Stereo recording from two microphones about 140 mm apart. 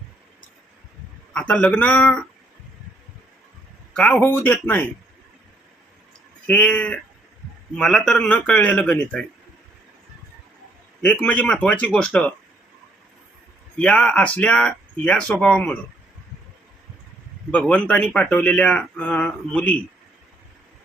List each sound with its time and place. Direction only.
1.3 s speech: 5° left (ahead or behind)
3.9 s speech: 10° left (ahead or behind)
6.5 s speech: 10° left (ahead or behind)
11.0 s speech: 10° left (ahead or behind)
13.7 s speech: 10° left (ahead or behind)
17.5 s speech: 10° left (ahead or behind)